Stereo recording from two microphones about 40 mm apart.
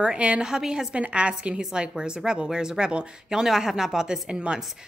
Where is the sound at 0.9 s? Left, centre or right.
Right.